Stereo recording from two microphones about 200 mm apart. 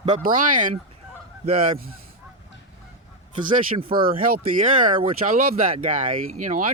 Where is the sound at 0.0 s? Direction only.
35° right (ahead or behind).